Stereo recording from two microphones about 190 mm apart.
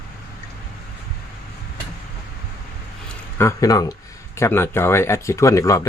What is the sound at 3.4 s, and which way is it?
Speech, 15° left (ahead or behind).